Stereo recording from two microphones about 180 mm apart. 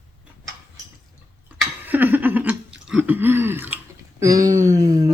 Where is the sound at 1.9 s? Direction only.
10° right (ahead or behind).